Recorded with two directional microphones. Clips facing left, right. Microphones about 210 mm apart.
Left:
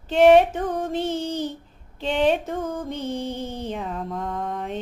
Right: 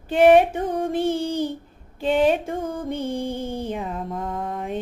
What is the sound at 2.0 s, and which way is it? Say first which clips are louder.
Music: right 2 dB; 5° right (ahead or behind).